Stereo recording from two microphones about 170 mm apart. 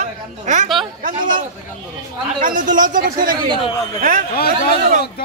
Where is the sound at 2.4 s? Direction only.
50° right (ahead or behind).